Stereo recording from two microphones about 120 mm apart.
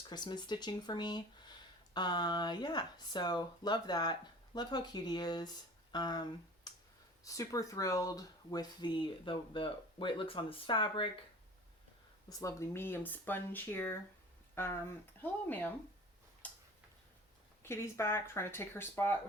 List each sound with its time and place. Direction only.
0.1 s speech: 35° left (ahead or behind)
6.7 s clicking: 35° left (ahead or behind)
7.3 s speech: 30° left (ahead or behind); by 11.1 s 45° left (ahead or behind)
12.3 s speech: 25° left (ahead or behind)
16.4 s tick-tock: 15° left (ahead or behind)
17.6 s speech: 20° left (ahead or behind)